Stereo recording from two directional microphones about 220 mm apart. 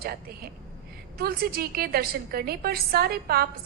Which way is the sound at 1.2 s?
45° right (ahead or behind).